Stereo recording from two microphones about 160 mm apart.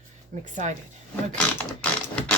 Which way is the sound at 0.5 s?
45° right (ahead or behind).